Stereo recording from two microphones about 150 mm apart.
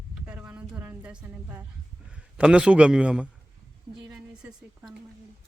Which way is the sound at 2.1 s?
5° right (ahead or behind).